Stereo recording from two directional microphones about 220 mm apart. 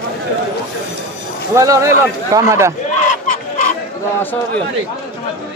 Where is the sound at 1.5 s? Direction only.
15° right (ahead or behind).